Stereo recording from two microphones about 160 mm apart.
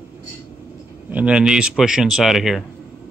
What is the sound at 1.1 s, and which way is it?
Speech, 5° right (ahead or behind).